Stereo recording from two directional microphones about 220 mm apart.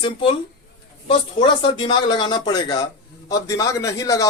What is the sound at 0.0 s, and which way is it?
A man's voice, 25° left (ahead or behind).